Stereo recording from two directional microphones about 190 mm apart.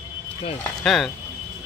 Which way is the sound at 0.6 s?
Centre (ahead or behind).